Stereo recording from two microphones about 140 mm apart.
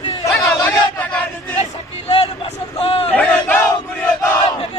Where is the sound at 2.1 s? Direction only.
45° left (ahead or behind).